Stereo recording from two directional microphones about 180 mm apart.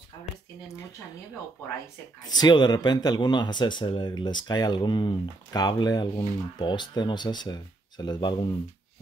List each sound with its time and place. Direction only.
2.2 s speech: 25° left (ahead or behind)